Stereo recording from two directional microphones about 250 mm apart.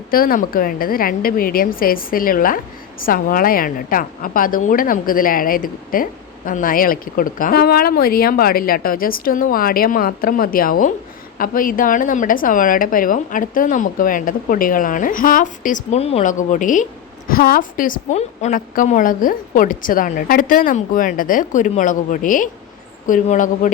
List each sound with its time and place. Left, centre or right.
0.1 s a woman's voice: left